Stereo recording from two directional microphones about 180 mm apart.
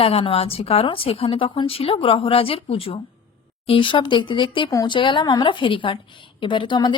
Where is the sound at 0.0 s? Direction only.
30° left (ahead or behind).